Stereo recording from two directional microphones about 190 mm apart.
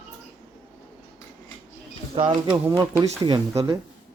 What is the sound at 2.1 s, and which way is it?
Speech, 30° right (ahead or behind).